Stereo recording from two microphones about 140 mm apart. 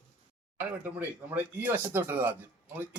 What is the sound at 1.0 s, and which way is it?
Speech, 15° right (ahead or behind).